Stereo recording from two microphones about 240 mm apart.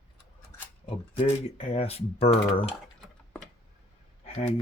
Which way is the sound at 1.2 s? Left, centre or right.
Left.